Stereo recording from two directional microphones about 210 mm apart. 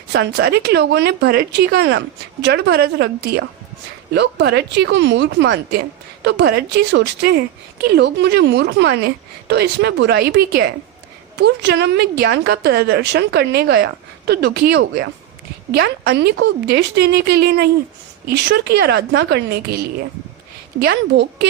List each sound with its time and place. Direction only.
0.1 s a woman's voice: 55° right (ahead or behind)